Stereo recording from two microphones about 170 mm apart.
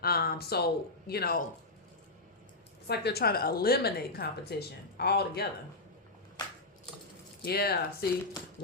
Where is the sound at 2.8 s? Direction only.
70° left (ahead or behind).